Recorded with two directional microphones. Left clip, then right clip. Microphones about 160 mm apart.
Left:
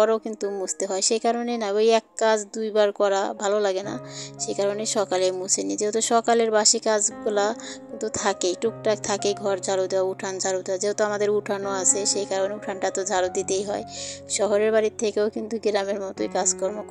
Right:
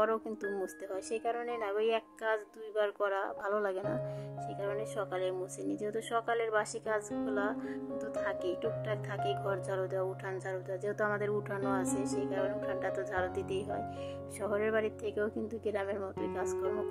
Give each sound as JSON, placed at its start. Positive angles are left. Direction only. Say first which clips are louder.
{"t": 0.0, "sound": "a woman's voice", "louder": "left 11 dB", "side_deg": 35}